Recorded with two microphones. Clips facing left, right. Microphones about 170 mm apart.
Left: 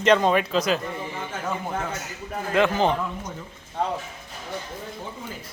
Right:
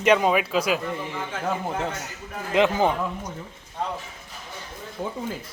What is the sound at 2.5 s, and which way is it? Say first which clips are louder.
Speech: right 1 dB; 15° right (ahead or behind).